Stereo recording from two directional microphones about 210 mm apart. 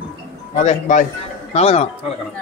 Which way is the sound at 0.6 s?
35° left (ahead or behind).